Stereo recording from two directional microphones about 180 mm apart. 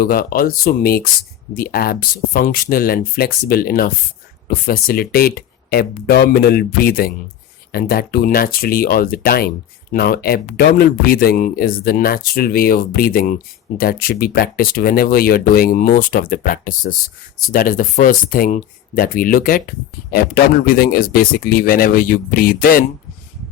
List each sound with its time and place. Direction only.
0.0 s speech: 55° left (ahead or behind)